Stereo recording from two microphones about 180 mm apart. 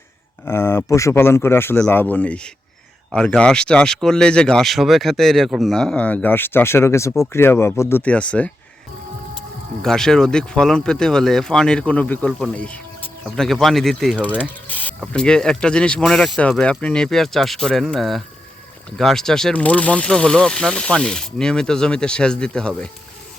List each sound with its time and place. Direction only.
0.4 s speech: 15° left (ahead or behind)
9.8 s speech: 5° left (ahead or behind)